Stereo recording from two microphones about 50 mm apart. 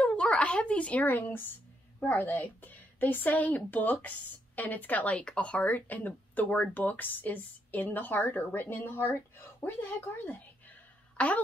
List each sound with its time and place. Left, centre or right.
0.0 s a sound: left
1.0 s speech: left
5.2 s speech: left
11.1 s speech: left